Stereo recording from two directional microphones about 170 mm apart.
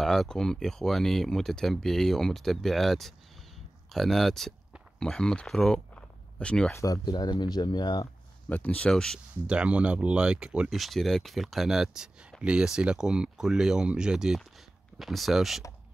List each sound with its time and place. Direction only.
0.0 s speech: centre (ahead or behind)
6.8 s speech: 20° left (ahead or behind)
8.5 s speech: 10° left (ahead or behind)